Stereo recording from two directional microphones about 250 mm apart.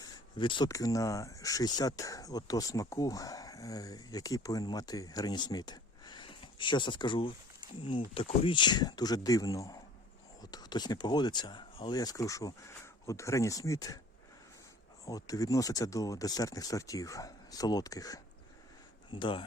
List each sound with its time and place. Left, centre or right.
0.0 s speech: centre
15.0 s speech: centre